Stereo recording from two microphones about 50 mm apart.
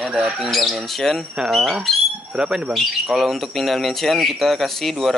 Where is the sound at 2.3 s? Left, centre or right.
Centre.